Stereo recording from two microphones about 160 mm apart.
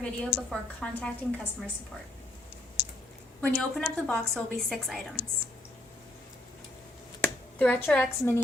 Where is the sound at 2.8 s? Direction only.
90° left.